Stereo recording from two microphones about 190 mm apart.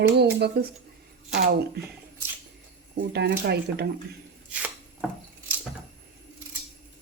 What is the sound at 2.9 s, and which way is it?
Speech, 60° right (ahead or behind).